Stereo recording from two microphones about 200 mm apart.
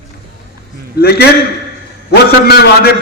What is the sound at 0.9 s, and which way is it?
A man's voice, 55° left (ahead or behind).